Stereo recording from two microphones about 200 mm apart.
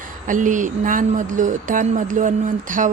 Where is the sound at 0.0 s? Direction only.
40° right (ahead or behind).